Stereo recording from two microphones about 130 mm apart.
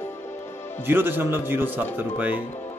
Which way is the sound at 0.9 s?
15° right (ahead or behind).